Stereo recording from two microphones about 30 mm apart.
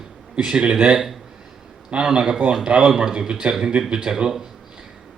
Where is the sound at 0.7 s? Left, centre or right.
Right.